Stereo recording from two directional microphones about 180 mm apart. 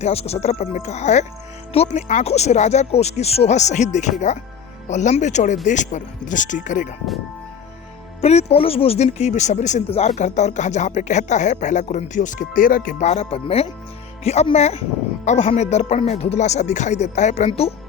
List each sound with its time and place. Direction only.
0.0 s speech: 35° left (ahead or behind)
8.2 s speech: 35° left (ahead or behind)